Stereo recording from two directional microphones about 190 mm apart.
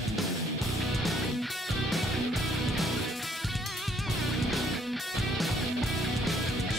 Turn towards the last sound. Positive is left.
turn(degrees=0)  # may be behind; listen again after turning